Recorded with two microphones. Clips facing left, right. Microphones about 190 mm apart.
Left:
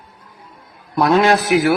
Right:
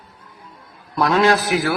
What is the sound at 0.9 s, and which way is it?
Speech, 25° left (ahead or behind).